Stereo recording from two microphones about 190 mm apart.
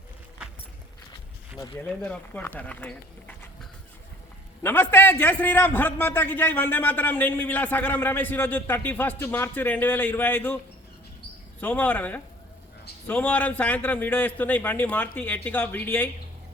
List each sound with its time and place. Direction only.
1.5 s a man's voice: 20° left (ahead or behind)
11.6 s a man's voice: 10° left (ahead or behind)